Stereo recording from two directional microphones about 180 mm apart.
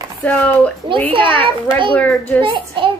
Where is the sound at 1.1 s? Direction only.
30° right (ahead or behind).